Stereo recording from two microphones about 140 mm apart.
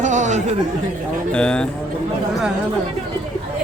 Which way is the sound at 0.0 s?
60° right (ahead or behind).